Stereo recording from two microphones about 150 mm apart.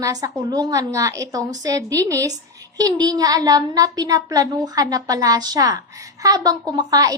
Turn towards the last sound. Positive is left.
turn(degrees=-25)  # may be behind; listen again after turning